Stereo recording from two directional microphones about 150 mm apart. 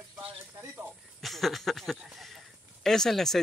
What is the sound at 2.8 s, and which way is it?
Speech, 5° left (ahead or behind).